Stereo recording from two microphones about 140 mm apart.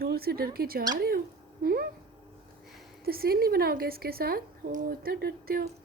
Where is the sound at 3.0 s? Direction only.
90° right.